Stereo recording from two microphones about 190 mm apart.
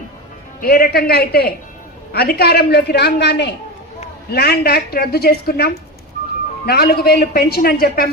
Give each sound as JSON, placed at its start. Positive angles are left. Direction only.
{"t": 0.6, "sound": "a man's voice", "side_deg": 55}